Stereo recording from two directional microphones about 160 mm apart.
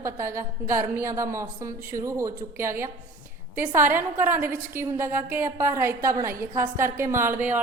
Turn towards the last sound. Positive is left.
turn(degrees=-15)  # may be behind; listen again after turning